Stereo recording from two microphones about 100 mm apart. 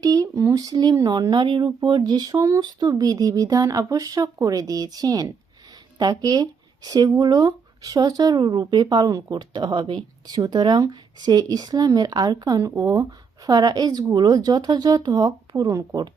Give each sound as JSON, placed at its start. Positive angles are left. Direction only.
{"t": 0.0, "sound": "speech", "side_deg": -40}
{"t": 10.3, "sound": "speech", "side_deg": -40}